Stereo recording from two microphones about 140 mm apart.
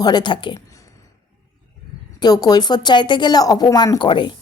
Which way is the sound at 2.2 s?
30° left (ahead or behind).